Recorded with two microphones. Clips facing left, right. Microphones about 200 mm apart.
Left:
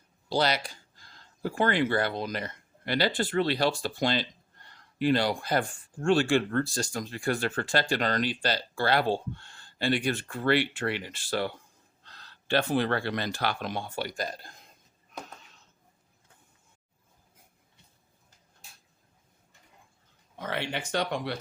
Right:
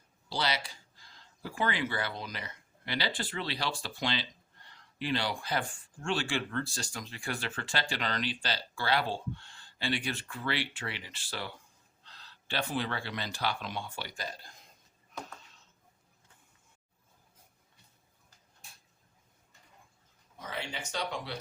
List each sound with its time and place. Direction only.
0.3 s speech: 45° left (ahead or behind)
20.4 s speech: 65° left (ahead or behind)